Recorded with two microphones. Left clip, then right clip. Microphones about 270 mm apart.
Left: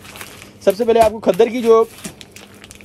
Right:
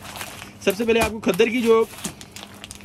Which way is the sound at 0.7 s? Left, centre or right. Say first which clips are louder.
Left 7 dB; centre.